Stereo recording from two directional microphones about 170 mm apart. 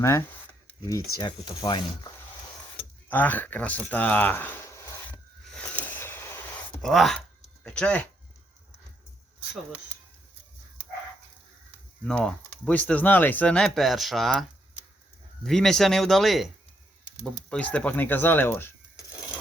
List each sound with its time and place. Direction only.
0.0 s speech: 15° left (ahead or behind)
3.1 s a sound: 10° left (ahead or behind)
6.7 s a sound: centre (ahead or behind)
12.0 s speech: 5° left (ahead or behind)
15.4 s speech: centre (ahead or behind)
17.5 s speech: 10° left (ahead or behind)